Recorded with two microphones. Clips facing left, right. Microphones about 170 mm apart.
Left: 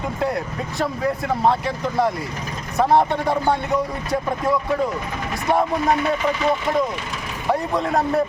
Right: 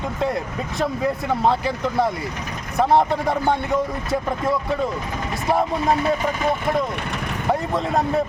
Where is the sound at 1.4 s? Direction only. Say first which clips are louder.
Even; centre (ahead or behind).